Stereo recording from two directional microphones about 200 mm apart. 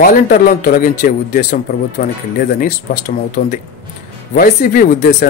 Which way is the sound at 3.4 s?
40° left (ahead or behind).